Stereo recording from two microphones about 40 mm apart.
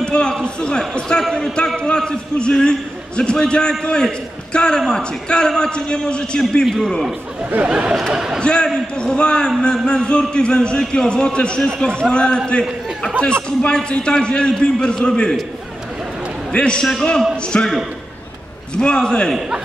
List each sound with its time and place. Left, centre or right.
0.0 s a man's voice: left
6.6 s a man's voice: centre
7.6 s speech: right
8.4 s a man's voice: left
16.5 s a man's voice: left
18.8 s a man's voice: left